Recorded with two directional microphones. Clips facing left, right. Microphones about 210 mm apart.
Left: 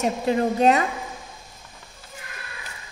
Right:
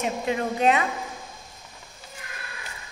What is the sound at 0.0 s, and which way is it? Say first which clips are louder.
Speech: left 4 dB; 35° left (ahead or behind).